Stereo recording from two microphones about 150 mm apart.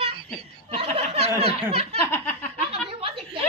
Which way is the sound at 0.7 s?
40° right (ahead or behind).